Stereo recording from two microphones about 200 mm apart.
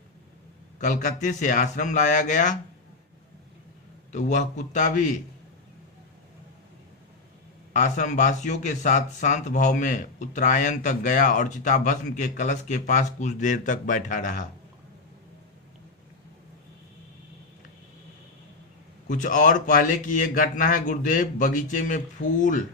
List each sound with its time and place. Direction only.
0.8 s speech: 40° left (ahead or behind)
4.1 s speech: 35° left (ahead or behind)
7.7 s speech: 40° left (ahead or behind)
19.1 s speech: 40° left (ahead or behind)